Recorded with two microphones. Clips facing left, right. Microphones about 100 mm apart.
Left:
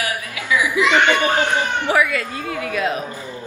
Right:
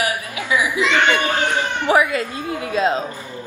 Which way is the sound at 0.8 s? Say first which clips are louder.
Left 3 dB; 15° left (ahead or behind).